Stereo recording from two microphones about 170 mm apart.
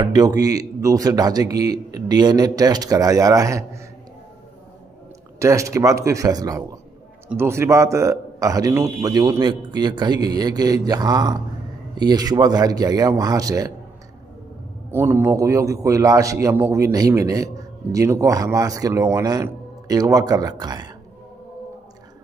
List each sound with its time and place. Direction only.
0.0 s a man's voice: 25° right (ahead or behind)
5.4 s a man's voice: 15° right (ahead or behind)
14.9 s a man's voice: 15° right (ahead or behind)